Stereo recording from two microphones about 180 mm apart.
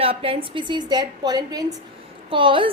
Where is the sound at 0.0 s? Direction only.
30° right (ahead or behind).